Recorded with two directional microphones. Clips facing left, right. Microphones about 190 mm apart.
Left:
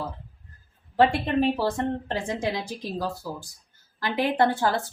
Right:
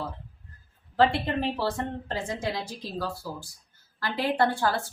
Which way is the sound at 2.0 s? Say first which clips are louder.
Left 3 dB; 20° left (ahead or behind).